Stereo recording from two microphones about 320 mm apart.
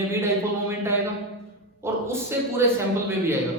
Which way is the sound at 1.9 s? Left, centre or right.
Centre.